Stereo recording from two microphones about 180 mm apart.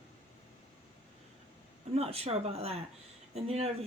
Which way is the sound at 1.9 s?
35° right (ahead or behind).